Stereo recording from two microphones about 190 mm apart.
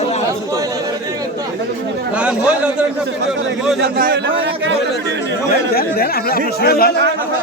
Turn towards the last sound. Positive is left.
turn(degrees=55)  # may be behind; listen again after turning